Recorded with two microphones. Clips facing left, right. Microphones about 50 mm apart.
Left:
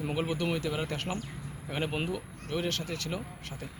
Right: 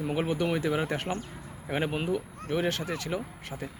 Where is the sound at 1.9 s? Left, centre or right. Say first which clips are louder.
Right 4 dB; centre.